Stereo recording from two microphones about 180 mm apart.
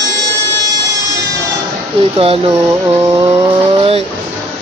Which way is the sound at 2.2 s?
30° right (ahead or behind).